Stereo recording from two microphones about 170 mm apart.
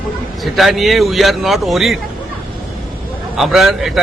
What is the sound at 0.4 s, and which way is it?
A man's voice, centre (ahead or behind).